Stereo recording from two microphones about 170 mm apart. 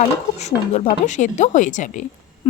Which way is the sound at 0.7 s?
45° left (ahead or behind).